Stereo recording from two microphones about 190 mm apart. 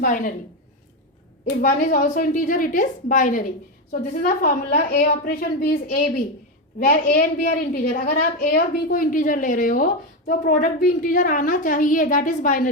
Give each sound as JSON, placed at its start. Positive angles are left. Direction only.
{"t": 0.0, "sound": "a woman's voice", "side_deg": 45}
{"t": 1.8, "sound": "a woman's voice", "side_deg": 45}